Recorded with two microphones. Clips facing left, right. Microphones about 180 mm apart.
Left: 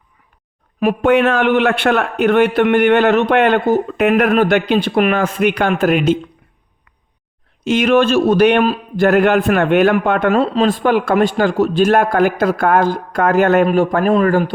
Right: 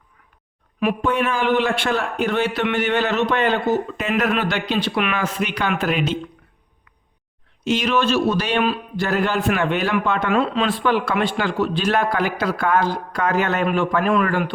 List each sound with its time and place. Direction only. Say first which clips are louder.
1.0 s a man's voice: left 9 dB; 70° left (ahead or behind)
4.1 s speech: left 7 dB; 50° left (ahead or behind)
7.6 s a man's voice: left 7 dB; 55° left (ahead or behind)
8.6 s a man's voice: left 6 dB; 40° left (ahead or behind)
9.0 s a man's voice: left 8 dB; 65° left (ahead or behind)
10.3 s speech: left 5 dB; 40° left (ahead or behind)
13.7 s a man's voice: left 5 dB; 35° left (ahead or behind)